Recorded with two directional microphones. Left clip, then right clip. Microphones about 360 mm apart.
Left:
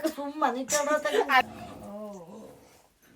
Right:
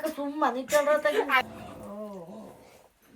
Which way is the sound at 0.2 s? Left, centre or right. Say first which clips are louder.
Right 1 dB; centre.